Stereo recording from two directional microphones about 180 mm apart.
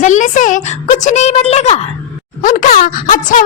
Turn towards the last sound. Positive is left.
turn(degrees=50)  # may be behind; listen again after turning